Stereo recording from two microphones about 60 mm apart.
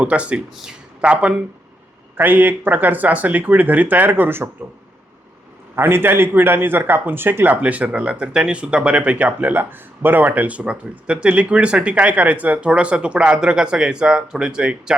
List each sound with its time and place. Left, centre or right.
0.0 s a man's voice: right
2.1 s a man's voice: right
5.7 s a man's voice: right; by 14.9 s centre